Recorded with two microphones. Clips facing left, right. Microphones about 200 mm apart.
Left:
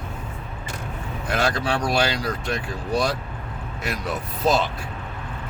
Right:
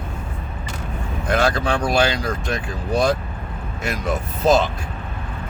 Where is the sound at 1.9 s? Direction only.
50° right (ahead or behind).